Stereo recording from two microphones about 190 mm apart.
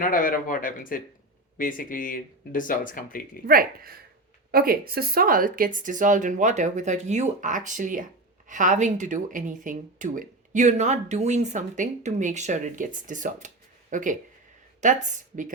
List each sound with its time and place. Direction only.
0.0 s speech: 45° left (ahead or behind)
3.4 s speech: 50° right (ahead or behind)